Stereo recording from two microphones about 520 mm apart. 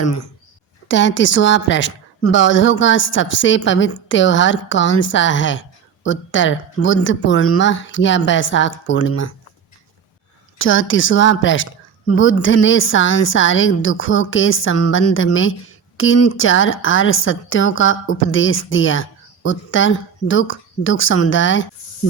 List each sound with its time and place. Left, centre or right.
0.0 s a woman's voice: left
10.6 s a woman's voice: left